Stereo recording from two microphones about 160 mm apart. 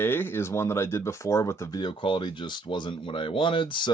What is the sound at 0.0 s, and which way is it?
Speech, 15° left (ahead or behind).